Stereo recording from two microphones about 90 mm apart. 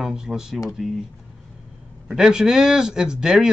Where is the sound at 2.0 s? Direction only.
5° right (ahead or behind).